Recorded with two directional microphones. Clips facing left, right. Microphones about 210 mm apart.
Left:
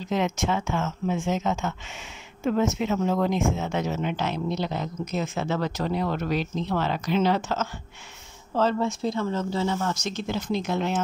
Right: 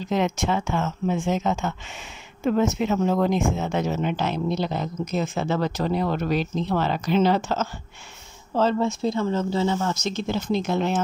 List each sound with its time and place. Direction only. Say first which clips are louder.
0.1 s speech: right 2 dB; 35° right (ahead or behind)